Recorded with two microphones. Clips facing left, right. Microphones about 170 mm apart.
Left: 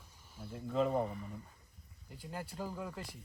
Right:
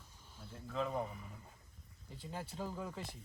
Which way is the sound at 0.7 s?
45° left (ahead or behind).